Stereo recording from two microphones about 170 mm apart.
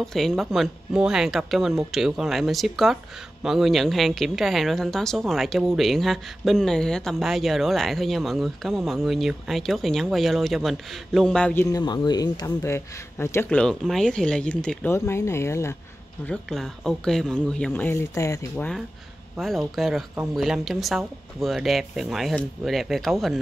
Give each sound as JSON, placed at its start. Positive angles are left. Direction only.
{"t": 0.0, "sound": "a woman's voice", "side_deg": 0}
{"t": 11.6, "sound": "speech", "side_deg": 25}
{"t": 16.3, "sound": "a woman's voice", "side_deg": 0}
{"t": 19.3, "sound": "a woman's voice", "side_deg": 0}